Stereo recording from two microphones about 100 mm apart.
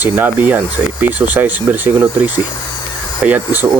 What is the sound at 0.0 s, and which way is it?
Speech, 20° right (ahead or behind).